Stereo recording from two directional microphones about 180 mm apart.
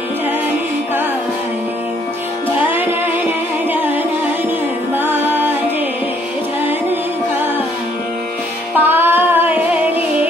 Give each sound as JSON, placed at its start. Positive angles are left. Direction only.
{"t": 2.7, "sound": "music", "side_deg": -10}
{"t": 4.9, "sound": "music", "side_deg": -10}
{"t": 8.7, "sound": "music", "side_deg": -10}